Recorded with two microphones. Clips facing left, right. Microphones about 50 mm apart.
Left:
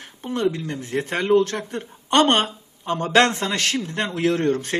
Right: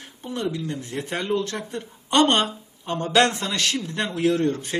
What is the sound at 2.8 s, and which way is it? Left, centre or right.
Speech, left.